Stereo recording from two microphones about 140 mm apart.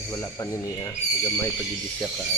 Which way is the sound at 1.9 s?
5° left (ahead or behind).